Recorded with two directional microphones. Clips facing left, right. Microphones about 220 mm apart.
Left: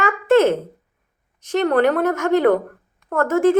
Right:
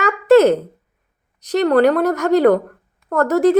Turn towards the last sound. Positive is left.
turn(degrees=-35)  # may be behind; listen again after turning